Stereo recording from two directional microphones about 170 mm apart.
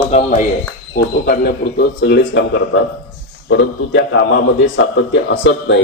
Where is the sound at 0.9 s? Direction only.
65° left (ahead or behind); by 5.8 s 90° left.